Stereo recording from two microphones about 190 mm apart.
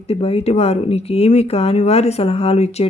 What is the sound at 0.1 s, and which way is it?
Speech, 30° left (ahead or behind).